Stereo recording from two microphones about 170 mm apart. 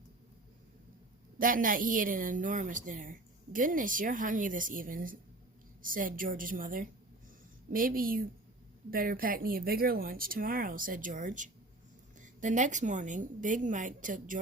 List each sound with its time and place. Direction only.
1.4 s a woman's voice: 55° right (ahead or behind)